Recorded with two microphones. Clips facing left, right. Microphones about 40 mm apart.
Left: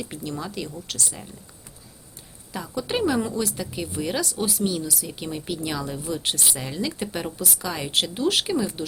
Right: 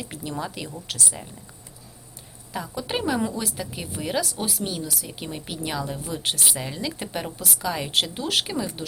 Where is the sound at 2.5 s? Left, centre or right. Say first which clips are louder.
Left 1 dB; centre.